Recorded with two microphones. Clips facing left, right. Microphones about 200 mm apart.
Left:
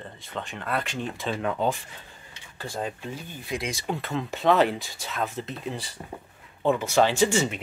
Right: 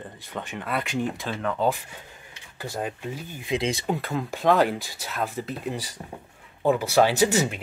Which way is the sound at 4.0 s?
Centre (ahead or behind).